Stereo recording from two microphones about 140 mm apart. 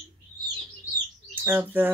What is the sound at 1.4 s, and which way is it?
Speech, 15° right (ahead or behind).